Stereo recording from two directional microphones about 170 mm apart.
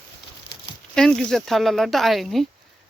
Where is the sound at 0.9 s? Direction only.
5° left (ahead or behind).